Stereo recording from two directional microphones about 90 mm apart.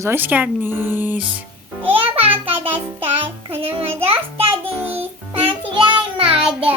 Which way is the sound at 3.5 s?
90° right.